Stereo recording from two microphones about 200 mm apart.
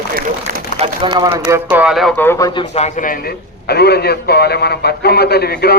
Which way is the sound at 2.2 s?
10° left (ahead or behind).